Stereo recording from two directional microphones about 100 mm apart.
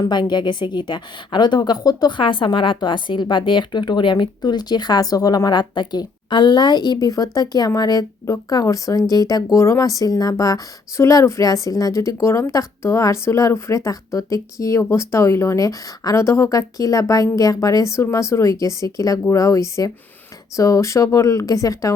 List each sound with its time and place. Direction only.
0.0 s a woman's voice: 50° left (ahead or behind)